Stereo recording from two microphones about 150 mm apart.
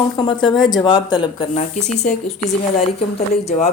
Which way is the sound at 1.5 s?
50° left (ahead or behind).